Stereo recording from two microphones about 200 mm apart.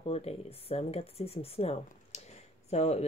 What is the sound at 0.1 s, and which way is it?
Speech, 30° left (ahead or behind).